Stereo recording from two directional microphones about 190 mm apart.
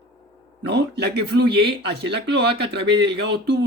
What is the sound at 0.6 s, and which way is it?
Speech, 60° right (ahead or behind).